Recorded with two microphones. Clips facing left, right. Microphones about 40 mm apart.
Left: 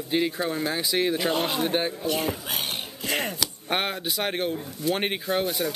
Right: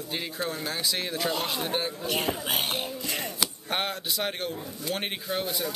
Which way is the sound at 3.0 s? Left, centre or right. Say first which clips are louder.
Left 5 dB; left.